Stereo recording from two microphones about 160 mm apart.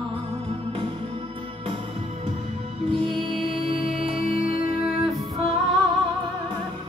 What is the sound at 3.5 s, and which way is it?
Music, 35° right (ahead or behind).